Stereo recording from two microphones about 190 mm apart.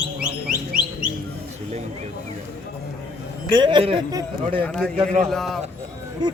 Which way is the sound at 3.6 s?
25° right (ahead or behind).